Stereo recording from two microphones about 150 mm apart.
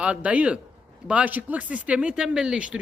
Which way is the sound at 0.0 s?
10° right (ahead or behind).